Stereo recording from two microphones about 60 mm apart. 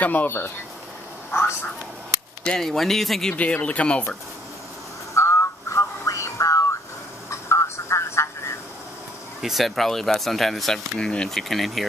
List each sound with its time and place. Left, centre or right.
0.0 s speech: left
1.3 s speech: left
2.4 s speech: centre
3.3 s speech: left
5.1 s a sound: left
7.2 s telephone: left
9.4 s speech: centre
11.0 s speech: centre